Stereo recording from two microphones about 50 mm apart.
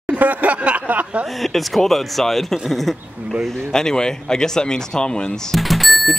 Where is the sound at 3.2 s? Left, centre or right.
Right.